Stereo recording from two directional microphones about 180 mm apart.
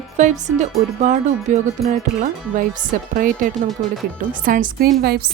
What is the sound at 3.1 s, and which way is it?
A woman's voice, 50° right (ahead or behind).